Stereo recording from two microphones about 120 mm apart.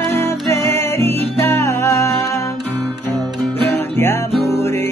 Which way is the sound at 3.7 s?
20° left (ahead or behind).